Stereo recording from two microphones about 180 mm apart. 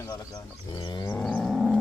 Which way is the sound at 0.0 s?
20° left (ahead or behind).